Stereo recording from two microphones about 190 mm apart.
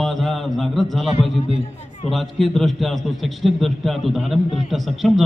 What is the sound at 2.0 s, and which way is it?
A man's voice, centre (ahead or behind).